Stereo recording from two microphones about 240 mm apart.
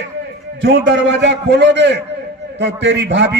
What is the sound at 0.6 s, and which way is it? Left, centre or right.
A man's voice, right.